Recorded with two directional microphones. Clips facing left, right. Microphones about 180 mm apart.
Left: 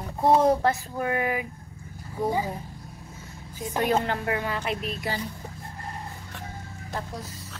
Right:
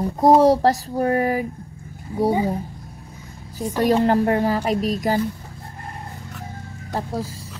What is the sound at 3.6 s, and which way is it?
A woman's voice, 40° right (ahead or behind).